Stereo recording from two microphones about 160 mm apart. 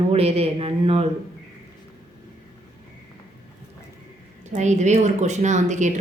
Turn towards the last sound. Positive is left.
turn(degrees=-50)  # may be behind; listen again after turning